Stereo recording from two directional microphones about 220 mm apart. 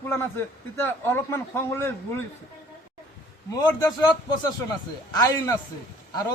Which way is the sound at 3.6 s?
15° left (ahead or behind).